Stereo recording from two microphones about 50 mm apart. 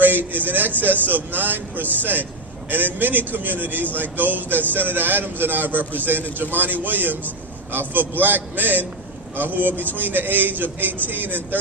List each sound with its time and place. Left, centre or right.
0.0 s speech: right